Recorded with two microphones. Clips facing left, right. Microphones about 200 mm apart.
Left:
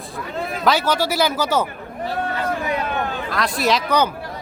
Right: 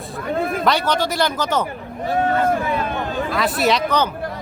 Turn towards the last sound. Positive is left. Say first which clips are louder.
# right 2 dB
turn(degrees=0)  # may be behind; listen again after turning